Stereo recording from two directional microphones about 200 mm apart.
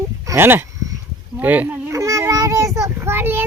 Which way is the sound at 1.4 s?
10° right (ahead or behind).